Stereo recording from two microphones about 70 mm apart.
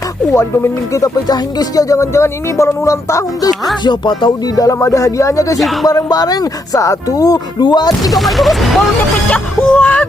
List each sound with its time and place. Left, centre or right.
0.3 s speech: left
3.8 s music: left
4.6 s speech: left
5.5 s speech: centre
6.1 s speech: left
8.1 s speech: centre
9.7 s speech: left